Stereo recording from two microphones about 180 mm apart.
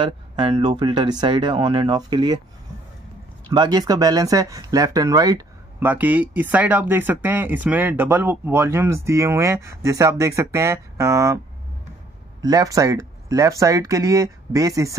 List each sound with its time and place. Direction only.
0.0 s speech: 25° right (ahead or behind)
3.4 s speech: 20° right (ahead or behind)
12.4 s speech: 20° right (ahead or behind)